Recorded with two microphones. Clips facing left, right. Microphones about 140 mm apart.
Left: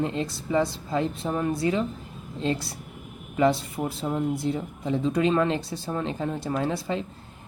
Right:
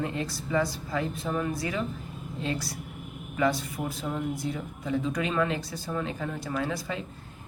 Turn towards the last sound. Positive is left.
turn(degrees=30)  # may be behind; listen again after turning